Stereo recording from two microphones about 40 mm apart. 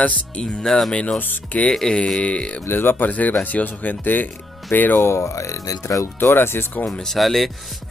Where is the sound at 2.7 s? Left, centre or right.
Left.